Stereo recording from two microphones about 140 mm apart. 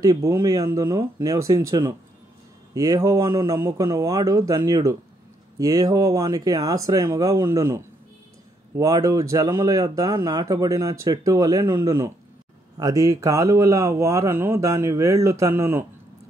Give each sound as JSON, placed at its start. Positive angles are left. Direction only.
{"t": 0.0, "sound": "speech", "side_deg": -20}